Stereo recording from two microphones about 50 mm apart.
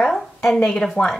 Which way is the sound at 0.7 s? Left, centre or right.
Centre.